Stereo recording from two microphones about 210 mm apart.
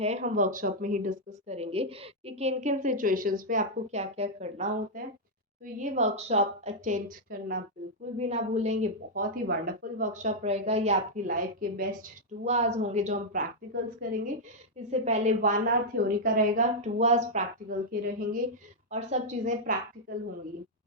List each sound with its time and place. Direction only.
0.0 s speech: 35° right (ahead or behind)
8.2 s speech: 30° right (ahead or behind)
12.5 s speech: 30° right (ahead or behind)
18.9 s speech: 35° right (ahead or behind)